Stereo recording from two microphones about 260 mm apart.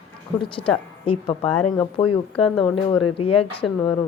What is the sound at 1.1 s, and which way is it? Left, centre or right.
Speech, left.